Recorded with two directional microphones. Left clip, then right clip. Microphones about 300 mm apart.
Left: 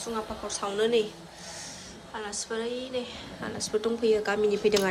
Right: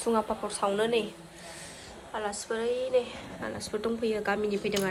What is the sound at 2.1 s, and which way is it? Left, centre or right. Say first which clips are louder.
A woman's voice: right 2 dB; centre.